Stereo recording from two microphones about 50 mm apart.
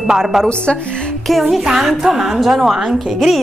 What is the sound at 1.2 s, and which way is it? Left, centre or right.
A woman's voice, centre.